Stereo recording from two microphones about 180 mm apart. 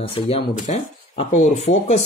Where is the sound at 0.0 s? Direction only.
35° left (ahead or behind).